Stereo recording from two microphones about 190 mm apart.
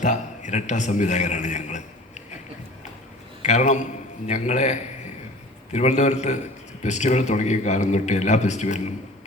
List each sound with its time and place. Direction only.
0.0 s speech: 40° left (ahead or behind)
3.4 s speech: 40° left (ahead or behind)